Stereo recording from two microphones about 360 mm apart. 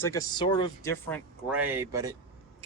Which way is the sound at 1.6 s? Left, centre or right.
Centre.